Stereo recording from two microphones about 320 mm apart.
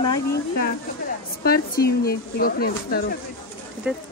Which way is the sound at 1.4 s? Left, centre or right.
Left.